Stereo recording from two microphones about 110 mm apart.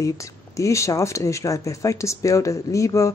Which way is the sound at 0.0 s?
30° left (ahead or behind).